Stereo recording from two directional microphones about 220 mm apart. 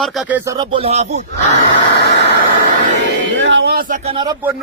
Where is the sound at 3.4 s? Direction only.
55° right (ahead or behind); by 4.4 s 20° right (ahead or behind).